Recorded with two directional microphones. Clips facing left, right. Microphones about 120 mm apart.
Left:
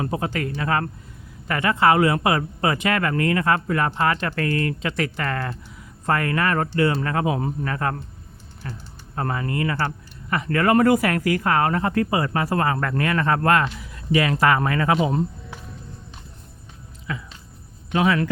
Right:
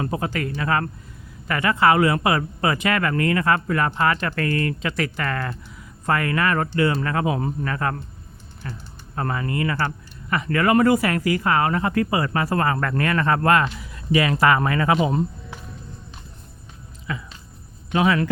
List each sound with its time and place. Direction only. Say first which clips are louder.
0.0 s a man's voice: even; 25° left (ahead or behind); by 13.4 s 5° left (ahead or behind)
13.4 s speech: right 1 dB; 10° right (ahead or behind)
14.9 s speech: even; 5° right (ahead or behind)
17.1 s speech: right 1 dB; 30° right (ahead or behind)